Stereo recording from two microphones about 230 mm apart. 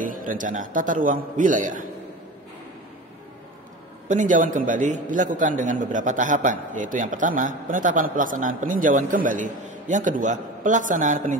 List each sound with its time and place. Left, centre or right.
0.0 s a man's voice: right
4.1 s a man's voice: right